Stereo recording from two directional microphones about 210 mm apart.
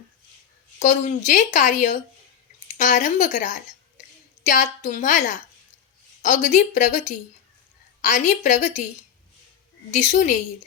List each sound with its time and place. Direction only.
0.8 s speech: 35° left (ahead or behind)
9.9 s speech: 35° left (ahead or behind)